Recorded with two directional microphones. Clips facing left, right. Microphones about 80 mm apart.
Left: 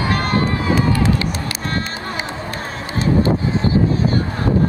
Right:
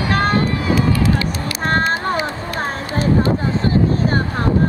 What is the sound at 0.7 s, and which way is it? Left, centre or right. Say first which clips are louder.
Run: even; left.